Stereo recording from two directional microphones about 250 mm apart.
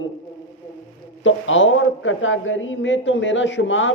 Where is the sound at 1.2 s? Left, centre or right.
Left.